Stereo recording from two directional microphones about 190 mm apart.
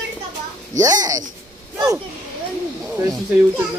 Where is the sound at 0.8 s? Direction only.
20° right (ahead or behind).